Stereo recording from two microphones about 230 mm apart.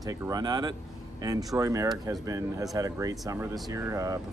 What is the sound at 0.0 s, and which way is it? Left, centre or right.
A man's voice, centre.